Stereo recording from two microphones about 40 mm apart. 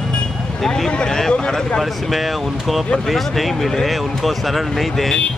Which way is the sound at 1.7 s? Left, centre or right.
Centre.